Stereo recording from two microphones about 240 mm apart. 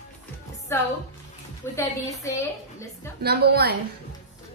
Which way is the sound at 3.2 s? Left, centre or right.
Right.